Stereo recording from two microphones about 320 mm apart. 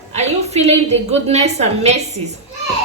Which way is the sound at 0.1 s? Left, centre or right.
Right.